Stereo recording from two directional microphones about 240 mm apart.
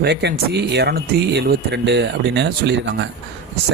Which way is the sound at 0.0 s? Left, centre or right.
Right.